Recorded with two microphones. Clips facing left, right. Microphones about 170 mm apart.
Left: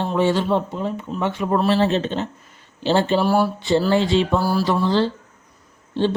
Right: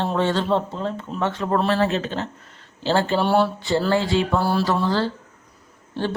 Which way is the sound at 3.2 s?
5° left (ahead or behind).